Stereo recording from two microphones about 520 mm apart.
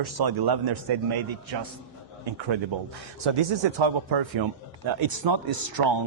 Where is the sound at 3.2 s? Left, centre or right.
Right.